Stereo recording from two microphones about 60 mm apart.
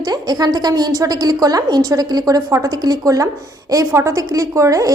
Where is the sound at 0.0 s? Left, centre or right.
Right.